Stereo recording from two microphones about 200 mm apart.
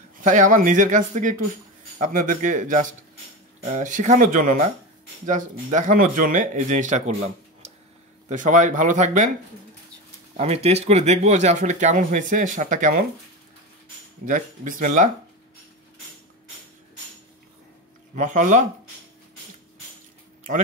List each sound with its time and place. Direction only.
0.2 s speech: 40° right (ahead or behind)
8.3 s speech: 40° right (ahead or behind)
10.3 s speech: 30° right (ahead or behind)
14.2 s speech: 40° right (ahead or behind)
18.1 s speech: 40° right (ahead or behind)